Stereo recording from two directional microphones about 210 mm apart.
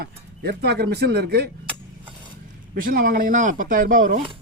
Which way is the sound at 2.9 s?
45° right (ahead or behind).